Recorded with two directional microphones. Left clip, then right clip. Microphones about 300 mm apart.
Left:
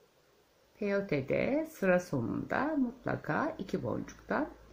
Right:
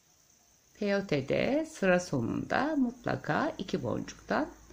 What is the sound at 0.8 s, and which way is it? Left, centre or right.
Speech, centre.